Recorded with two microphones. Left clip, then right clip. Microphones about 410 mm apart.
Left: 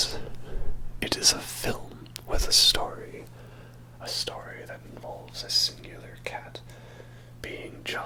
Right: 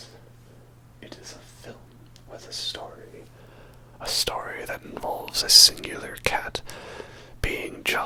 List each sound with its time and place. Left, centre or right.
0.9 s whispering: left; by 2.8 s centre
4.0 s speech: right
7.4 s whispering: right